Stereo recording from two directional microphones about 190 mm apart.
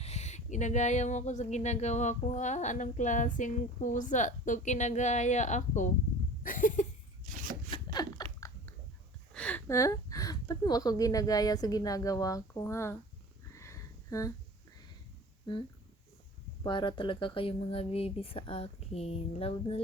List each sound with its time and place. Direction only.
0.0 s speech: 35° left (ahead or behind)
6.4 s cough: 45° left (ahead or behind)
7.9 s biting: 15° left (ahead or behind)
9.3 s a woman's voice: 5° left (ahead or behind)
13.5 s a sound: 15° left (ahead or behind)
16.6 s speech: 25° left (ahead or behind)